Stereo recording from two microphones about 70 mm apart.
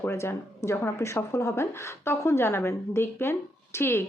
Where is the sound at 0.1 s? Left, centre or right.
Left.